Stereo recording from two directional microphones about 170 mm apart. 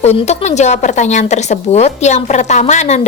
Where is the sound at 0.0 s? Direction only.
40° left (ahead or behind).